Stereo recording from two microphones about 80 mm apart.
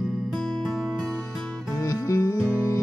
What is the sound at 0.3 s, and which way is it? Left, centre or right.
Music, centre.